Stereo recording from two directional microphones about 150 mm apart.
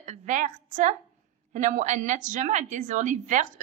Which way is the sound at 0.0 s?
55° right (ahead or behind).